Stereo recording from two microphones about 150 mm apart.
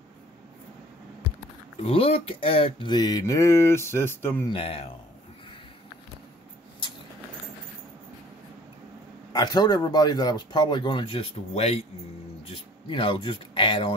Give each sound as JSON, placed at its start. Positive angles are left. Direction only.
{"t": 1.8, "sound": "speech", "side_deg": 40}
{"t": 4.5, "sound": "speech", "side_deg": 40}
{"t": 9.3, "sound": "speech", "side_deg": 25}
{"t": 12.8, "sound": "speech", "side_deg": 35}